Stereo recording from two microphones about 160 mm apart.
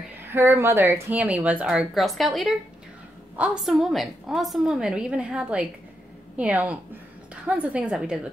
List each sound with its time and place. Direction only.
0.3 s a woman's voice: 15° right (ahead or behind)